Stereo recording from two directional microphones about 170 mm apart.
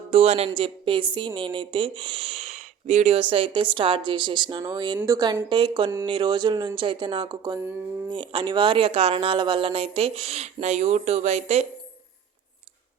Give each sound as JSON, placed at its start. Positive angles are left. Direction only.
{"t": 0.1, "sound": "a woman's voice", "side_deg": -40}